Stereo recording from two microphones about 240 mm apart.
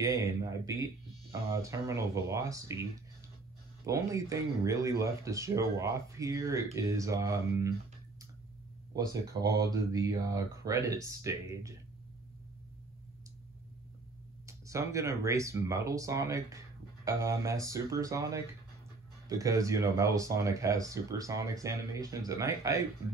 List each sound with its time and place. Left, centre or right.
0.0 s speech: centre
3.8 s speech: centre
8.9 s speech: centre
14.4 s speech: centre